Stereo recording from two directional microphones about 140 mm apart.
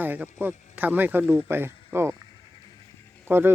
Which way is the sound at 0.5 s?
60° left (ahead or behind).